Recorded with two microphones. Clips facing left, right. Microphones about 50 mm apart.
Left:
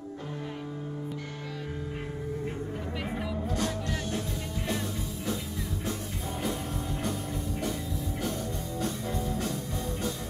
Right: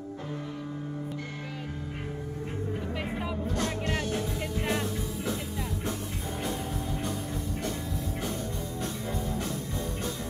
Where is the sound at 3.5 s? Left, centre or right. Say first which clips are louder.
Even; right.